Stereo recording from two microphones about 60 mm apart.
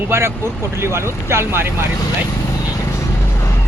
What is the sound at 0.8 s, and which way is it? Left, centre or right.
Speech, right.